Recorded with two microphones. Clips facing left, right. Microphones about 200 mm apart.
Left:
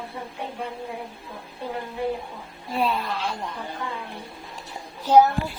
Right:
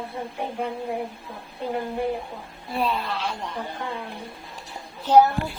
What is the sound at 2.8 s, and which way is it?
Speech, 10° left (ahead or behind).